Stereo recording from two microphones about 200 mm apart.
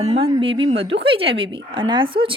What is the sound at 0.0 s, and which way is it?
Speech, 30° right (ahead or behind).